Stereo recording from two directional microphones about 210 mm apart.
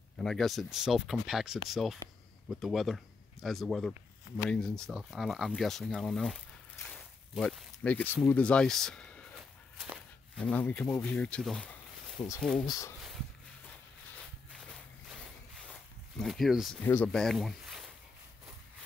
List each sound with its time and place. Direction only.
0.2 s speech: centre (ahead or behind)
10.3 s speech: 5° left (ahead or behind)
12.6 s speech: 15° left (ahead or behind)
16.2 s speech: centre (ahead or behind)